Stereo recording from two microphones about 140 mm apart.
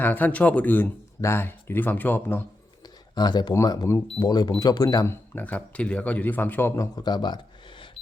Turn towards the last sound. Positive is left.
turn(degrees=30)  # may be behind; listen again after turning